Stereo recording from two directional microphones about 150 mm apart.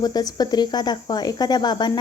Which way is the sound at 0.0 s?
25° left (ahead or behind).